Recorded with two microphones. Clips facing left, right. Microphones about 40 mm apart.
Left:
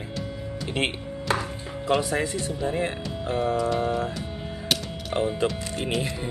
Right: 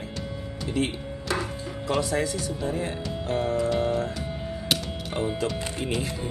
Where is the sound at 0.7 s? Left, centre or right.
Left.